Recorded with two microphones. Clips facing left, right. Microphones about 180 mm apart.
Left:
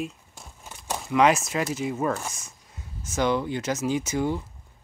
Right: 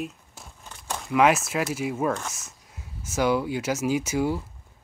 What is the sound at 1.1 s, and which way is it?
Speech, 5° right (ahead or behind).